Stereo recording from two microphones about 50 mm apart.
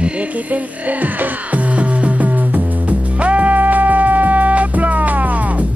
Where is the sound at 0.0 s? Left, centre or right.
Right.